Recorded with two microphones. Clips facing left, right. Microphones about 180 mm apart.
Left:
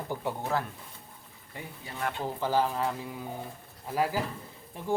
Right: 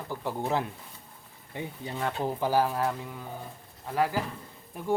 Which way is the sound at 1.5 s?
20° right (ahead or behind).